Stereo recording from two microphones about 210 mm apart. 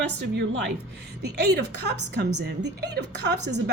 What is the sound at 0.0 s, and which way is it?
A woman's voice, 55° right (ahead or behind).